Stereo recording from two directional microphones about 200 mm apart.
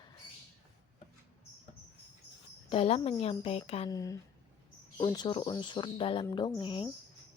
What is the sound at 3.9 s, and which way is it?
A woman's voice, 15° left (ahead or behind).